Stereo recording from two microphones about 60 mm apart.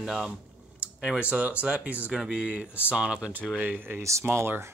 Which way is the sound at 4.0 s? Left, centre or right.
Right.